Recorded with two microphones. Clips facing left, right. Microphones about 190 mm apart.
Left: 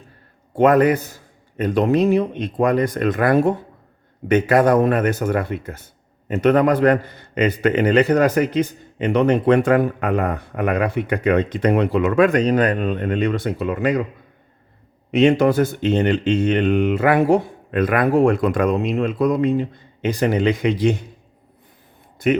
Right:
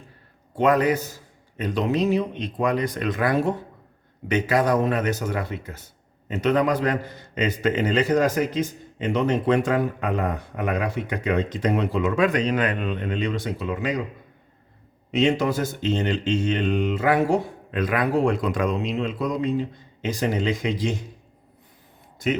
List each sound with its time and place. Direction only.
0.5 s a man's voice: 55° left (ahead or behind)
15.1 s a man's voice: 60° left (ahead or behind)
22.2 s a man's voice: 60° left (ahead or behind)